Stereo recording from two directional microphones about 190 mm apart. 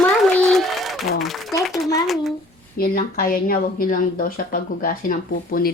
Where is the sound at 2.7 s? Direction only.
50° left (ahead or behind).